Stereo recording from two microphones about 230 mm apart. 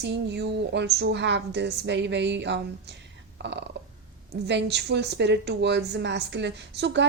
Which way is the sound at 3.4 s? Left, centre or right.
Right.